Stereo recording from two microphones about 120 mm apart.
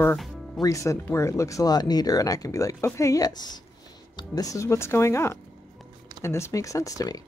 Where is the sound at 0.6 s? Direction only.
25° left (ahead or behind).